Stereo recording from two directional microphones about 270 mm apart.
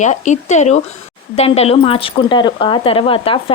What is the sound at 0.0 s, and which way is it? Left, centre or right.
Speech, left.